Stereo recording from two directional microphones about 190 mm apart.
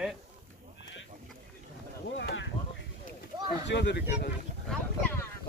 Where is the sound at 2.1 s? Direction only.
70° left (ahead or behind).